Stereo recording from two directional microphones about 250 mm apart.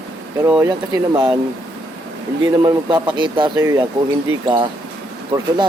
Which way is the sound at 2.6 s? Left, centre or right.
Centre.